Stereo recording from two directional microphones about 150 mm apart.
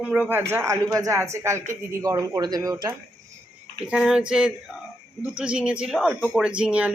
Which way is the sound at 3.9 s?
5° right (ahead or behind).